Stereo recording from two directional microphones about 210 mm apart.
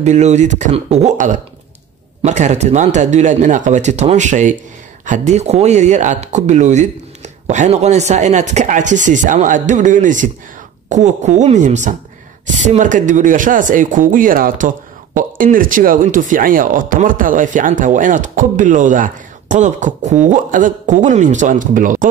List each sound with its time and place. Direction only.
0.0 s speech: 35° right (ahead or behind)